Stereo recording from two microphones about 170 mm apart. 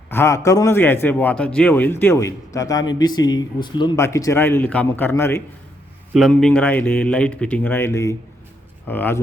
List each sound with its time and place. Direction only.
0.1 s a man's voice: 15° left (ahead or behind)
6.1 s a man's voice: centre (ahead or behind)